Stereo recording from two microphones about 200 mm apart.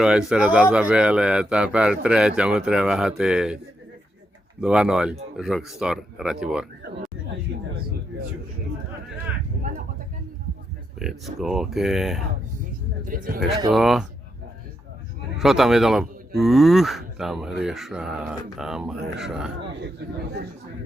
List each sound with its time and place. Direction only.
0.0 s speech: 5° right (ahead or behind)
4.6 s speech: 5° right (ahead or behind)
11.0 s speech: centre (ahead or behind)
13.1 s speech: 45° right (ahead or behind)
13.7 s speech: centre (ahead or behind)
15.4 s speech: centre (ahead or behind)